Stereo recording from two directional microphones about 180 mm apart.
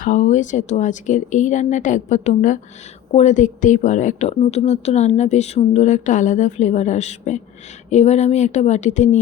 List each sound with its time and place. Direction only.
0.0 s speech: 45° left (ahead or behind)